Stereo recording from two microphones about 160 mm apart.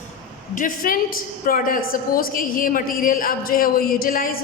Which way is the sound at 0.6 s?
60° left (ahead or behind).